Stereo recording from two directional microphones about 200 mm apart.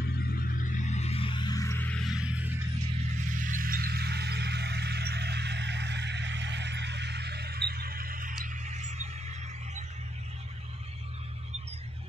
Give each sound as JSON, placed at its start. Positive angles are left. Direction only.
{"t": 0.0, "sound": "music", "side_deg": 45}
{"t": 3.3, "sound": "music", "side_deg": -40}